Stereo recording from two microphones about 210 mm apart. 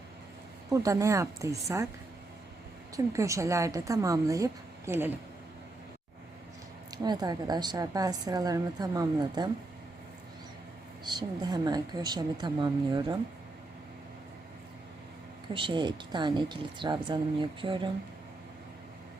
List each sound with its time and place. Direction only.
0.7 s a woman's voice: 15° right (ahead or behind)
2.9 s a woman's voice: 15° right (ahead or behind)
6.9 s a woman's voice: 20° right (ahead or behind)
11.0 s a woman's voice: 20° right (ahead or behind)
15.5 s a woman's voice: 25° right (ahead or behind)